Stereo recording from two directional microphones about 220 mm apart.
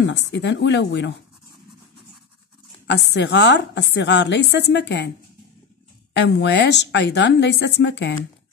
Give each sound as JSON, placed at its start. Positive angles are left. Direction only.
{"t": 0.0, "sound": "a woman's voice", "side_deg": 50}
{"t": 3.2, "sound": "a woman's voice", "side_deg": 50}
{"t": 6.1, "sound": "a woman's voice", "side_deg": 50}